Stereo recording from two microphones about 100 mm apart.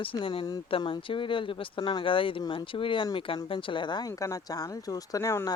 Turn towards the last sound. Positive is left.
turn(degrees=30)  # may be behind; listen again after turning